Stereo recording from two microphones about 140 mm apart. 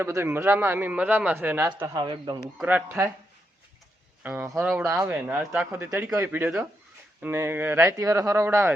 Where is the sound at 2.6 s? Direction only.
10° right (ahead or behind).